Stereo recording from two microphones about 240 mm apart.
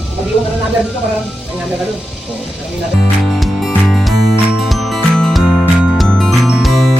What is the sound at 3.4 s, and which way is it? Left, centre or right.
Music, centre.